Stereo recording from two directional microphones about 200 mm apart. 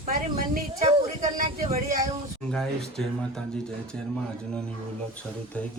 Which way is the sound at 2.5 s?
Centre (ahead or behind).